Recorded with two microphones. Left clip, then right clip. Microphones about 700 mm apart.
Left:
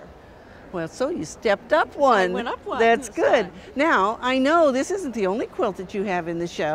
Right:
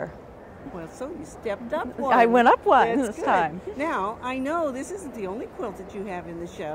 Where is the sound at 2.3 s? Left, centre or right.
Right.